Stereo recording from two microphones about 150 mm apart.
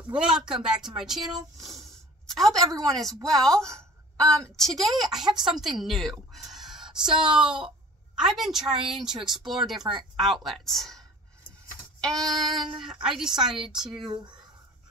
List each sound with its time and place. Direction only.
0.1 s a woman's voice: 5° right (ahead or behind)
12.2 s speech: centre (ahead or behind)